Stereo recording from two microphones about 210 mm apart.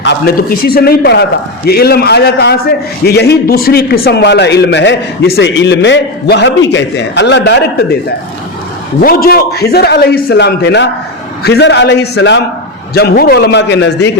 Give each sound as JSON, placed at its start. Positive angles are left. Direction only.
{"t": 0.0, "sound": "a man's voice", "side_deg": 50}
{"t": 9.0, "sound": "a man's voice", "side_deg": 45}